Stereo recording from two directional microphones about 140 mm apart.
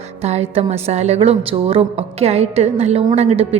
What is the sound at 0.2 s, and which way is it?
A woman's voice, 50° right (ahead or behind).